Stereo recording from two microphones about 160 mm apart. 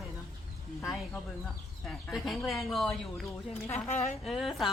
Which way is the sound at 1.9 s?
Centre (ahead or behind).